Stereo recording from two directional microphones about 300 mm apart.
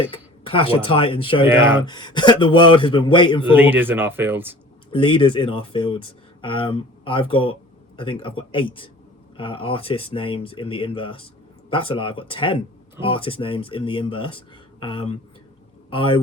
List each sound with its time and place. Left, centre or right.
0.1 s speech: centre
3.5 s speech: centre
4.9 s speech: centre